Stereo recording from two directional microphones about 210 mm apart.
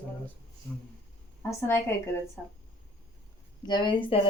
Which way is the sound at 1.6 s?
10° left (ahead or behind).